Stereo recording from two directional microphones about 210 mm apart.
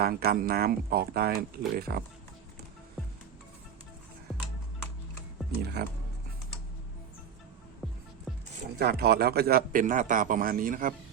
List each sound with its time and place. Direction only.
0.0 s speech: 45° right (ahead or behind)
5.8 s speech: 45° right (ahead or behind)
8.8 s a man's voice: 50° right (ahead or behind)